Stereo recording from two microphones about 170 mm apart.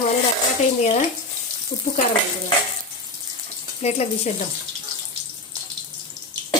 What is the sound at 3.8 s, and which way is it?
Speech, 40° left (ahead or behind).